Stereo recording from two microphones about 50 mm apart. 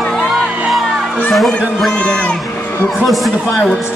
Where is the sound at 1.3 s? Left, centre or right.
Centre.